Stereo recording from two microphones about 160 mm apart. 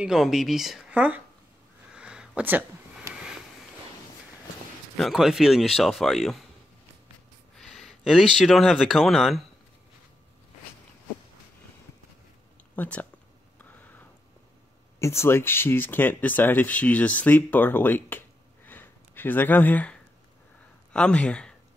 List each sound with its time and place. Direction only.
0.0 s speech: 5° right (ahead or behind)
2.0 s a sound: 5° right (ahead or behind)
4.9 s speech: centre (ahead or behind)
7.5 s speech: centre (ahead or behind)
12.7 s speech: 10° left (ahead or behind)
13.6 s a sound: 10° left (ahead or behind)
15.0 s speech: 15° left (ahead or behind)
18.7 s a sound: 10° left (ahead or behind)
20.9 s speech: 5° left (ahead or behind)